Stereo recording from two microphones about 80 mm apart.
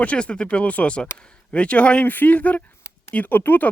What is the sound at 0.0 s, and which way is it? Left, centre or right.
Speech, centre.